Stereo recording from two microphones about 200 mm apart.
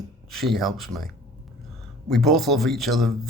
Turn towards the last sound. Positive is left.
turn(degrees=0)  # may be behind; listen again after turning